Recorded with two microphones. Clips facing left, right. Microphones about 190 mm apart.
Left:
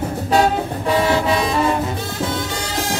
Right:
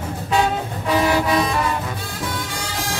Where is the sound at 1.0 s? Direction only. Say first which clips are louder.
Left 1 dB; 25° left (ahead or behind).